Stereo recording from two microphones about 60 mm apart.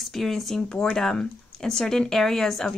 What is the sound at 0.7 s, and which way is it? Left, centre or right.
Speech, centre.